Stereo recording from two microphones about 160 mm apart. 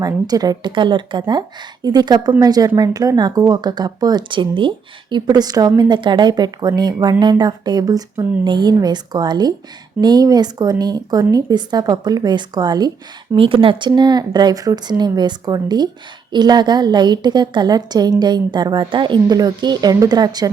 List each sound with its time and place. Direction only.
0.0 s a woman's voice: 25° right (ahead or behind)